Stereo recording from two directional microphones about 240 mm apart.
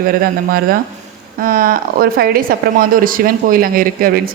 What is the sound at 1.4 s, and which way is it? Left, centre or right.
Speech, right.